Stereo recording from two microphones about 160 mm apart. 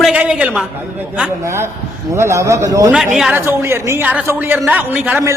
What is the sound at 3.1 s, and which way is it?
Speech, centre (ahead or behind).